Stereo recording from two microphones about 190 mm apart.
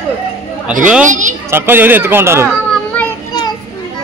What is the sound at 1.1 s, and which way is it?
Speech, 40° right (ahead or behind).